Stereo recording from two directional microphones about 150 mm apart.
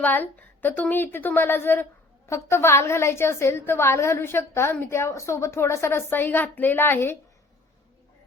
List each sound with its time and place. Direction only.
0.0 s a woman's voice: 10° left (ahead or behind)